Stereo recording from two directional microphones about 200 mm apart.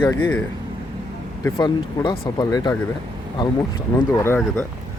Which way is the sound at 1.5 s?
20° left (ahead or behind).